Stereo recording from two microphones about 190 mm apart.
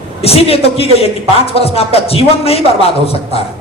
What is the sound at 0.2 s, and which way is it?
A man's voice, 30° left (ahead or behind).